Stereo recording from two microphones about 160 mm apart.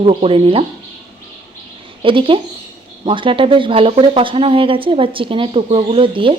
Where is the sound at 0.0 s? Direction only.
35° right (ahead or behind).